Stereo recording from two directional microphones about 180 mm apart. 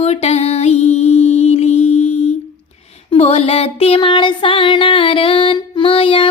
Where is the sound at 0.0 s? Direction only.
35° left (ahead or behind).